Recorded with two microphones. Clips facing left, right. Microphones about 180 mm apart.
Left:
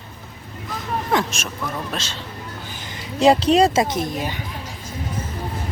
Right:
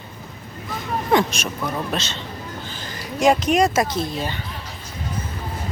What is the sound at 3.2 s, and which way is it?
Speech, 30° left (ahead or behind).